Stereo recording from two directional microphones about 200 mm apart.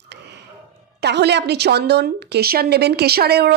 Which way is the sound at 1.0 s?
60° right (ahead or behind).